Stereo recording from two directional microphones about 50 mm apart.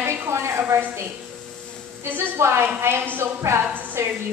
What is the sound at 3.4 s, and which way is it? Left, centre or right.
Speech, right.